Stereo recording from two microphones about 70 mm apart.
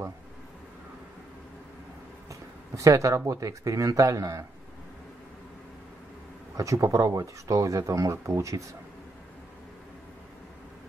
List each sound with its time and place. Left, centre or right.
2.2 s a sound: right
3.3 s speech: right
6.5 s speech: right